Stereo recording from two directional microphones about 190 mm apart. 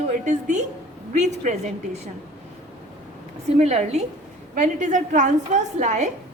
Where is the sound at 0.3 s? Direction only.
40° right (ahead or behind).